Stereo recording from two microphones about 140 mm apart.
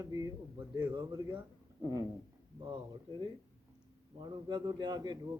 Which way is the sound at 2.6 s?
35° right (ahead or behind).